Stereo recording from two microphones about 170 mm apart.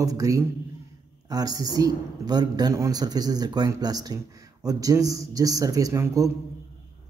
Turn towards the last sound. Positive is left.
turn(degrees=-20)  # may be behind; listen again after turning